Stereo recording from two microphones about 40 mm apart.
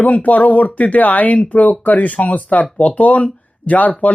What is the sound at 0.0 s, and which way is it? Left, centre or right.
Speech, left.